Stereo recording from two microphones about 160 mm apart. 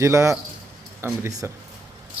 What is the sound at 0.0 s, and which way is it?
Speech, 15° right (ahead or behind).